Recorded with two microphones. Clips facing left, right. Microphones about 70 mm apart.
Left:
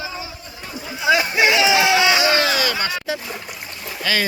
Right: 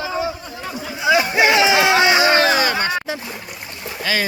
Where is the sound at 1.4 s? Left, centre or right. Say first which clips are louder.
Right 2 dB; right.